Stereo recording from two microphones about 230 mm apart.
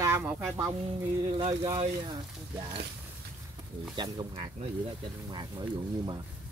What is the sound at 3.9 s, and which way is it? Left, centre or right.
Speech, centre.